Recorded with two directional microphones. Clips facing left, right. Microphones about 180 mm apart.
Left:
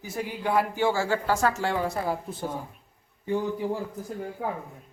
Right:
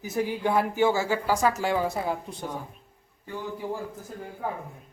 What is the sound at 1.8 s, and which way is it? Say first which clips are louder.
Speech: even; centre (ahead or behind).